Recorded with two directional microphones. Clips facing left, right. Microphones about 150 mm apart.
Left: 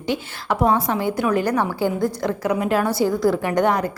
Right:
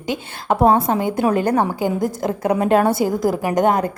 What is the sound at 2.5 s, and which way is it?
Speech, 35° right (ahead or behind).